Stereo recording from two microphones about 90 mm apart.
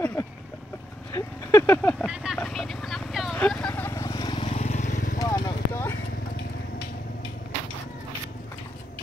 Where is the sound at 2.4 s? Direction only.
5° left (ahead or behind).